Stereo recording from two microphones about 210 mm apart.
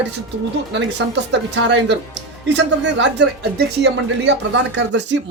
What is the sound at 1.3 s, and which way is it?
Speech, 55° right (ahead or behind).